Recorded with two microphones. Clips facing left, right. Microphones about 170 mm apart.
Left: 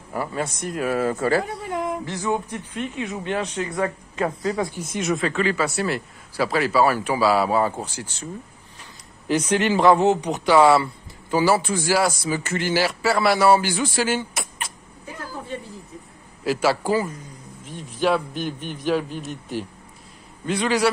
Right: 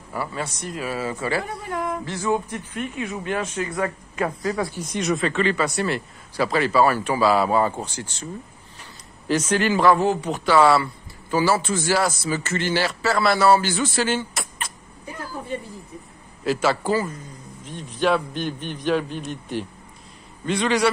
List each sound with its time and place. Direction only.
0.1 s speech: 45° left (ahead or behind)
1.7 s speech: 20° left (ahead or behind)
4.7 s a man's voice: 5° left (ahead or behind)
9.3 s a man's voice: 10° left (ahead or behind)
16.4 s a man's voice: 10° left (ahead or behind)